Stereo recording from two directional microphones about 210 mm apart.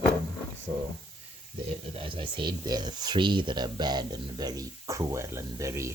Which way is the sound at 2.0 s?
25° right (ahead or behind).